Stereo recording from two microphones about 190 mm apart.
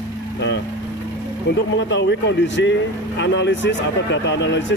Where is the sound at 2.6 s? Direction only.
70° left (ahead or behind).